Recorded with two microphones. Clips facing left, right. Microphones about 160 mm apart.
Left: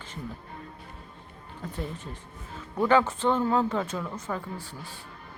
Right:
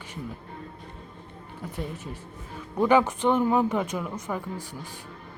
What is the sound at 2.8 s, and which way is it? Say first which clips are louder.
Speech: right 2 dB; 15° right (ahead or behind).